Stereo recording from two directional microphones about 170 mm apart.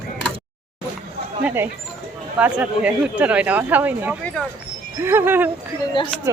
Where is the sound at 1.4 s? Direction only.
15° right (ahead or behind).